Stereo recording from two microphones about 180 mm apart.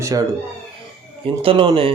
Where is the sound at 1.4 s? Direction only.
30° right (ahead or behind).